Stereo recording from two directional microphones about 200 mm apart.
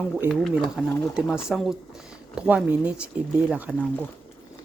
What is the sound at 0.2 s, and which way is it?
Speech, centre (ahead or behind).